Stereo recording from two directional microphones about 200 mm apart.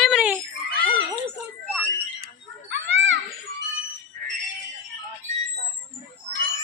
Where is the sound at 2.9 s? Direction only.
70° right (ahead or behind).